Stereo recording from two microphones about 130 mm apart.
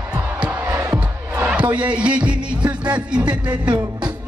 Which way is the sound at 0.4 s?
15° right (ahead or behind).